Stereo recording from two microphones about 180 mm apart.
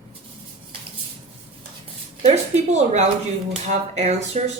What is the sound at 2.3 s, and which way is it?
Speech, 40° right (ahead or behind).